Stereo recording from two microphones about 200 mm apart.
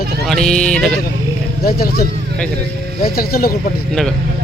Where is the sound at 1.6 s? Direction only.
50° left (ahead or behind).